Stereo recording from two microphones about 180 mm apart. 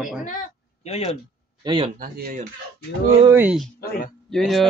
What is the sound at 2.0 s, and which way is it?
Speech, 55° right (ahead or behind).